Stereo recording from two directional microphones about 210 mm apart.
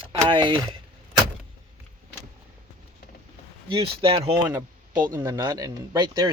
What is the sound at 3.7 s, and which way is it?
Speech, 25° right (ahead or behind).